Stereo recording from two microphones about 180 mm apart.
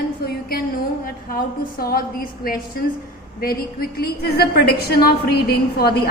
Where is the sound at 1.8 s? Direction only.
55° left (ahead or behind).